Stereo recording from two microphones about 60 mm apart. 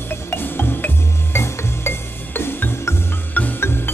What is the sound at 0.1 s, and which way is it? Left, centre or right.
Music, left.